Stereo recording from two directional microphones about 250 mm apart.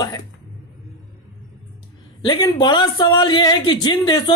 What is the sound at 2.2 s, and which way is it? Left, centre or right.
A man's voice, centre.